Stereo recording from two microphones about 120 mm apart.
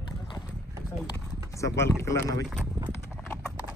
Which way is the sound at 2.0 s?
25° left (ahead or behind).